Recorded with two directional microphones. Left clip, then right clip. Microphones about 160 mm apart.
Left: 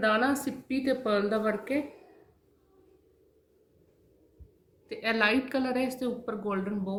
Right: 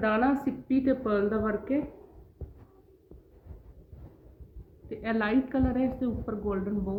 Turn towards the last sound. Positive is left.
turn(degrees=-5)  # may be behind; listen again after turning